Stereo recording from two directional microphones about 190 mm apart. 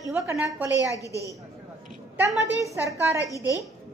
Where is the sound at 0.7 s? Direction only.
15° left (ahead or behind).